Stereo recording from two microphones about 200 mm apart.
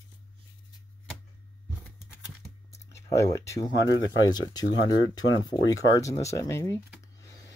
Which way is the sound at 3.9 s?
70° left (ahead or behind).